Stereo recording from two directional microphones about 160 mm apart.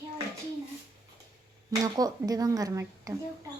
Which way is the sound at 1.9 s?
25° right (ahead or behind).